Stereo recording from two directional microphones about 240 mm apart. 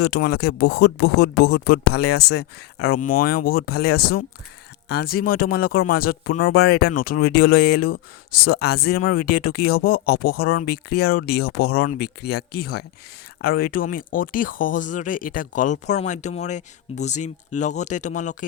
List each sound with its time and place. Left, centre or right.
0.0 s speech: left